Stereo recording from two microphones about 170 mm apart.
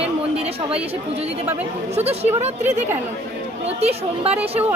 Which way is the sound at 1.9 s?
40° right (ahead or behind).